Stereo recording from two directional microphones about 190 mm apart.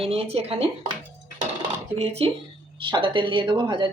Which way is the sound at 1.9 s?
30° right (ahead or behind).